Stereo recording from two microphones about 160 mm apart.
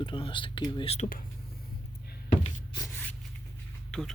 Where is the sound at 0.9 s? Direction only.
50° left (ahead or behind).